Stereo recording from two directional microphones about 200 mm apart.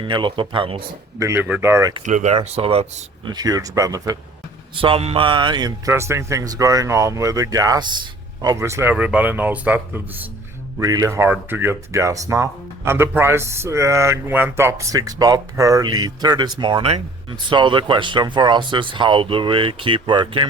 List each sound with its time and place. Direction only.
0.0 s speech: 25° right (ahead or behind)
1.2 s speech: 10° right (ahead or behind)
2.0 s speech: 35° right (ahead or behind); by 4.2 s 15° right (ahead or behind)
4.8 s speech: 30° right (ahead or behind)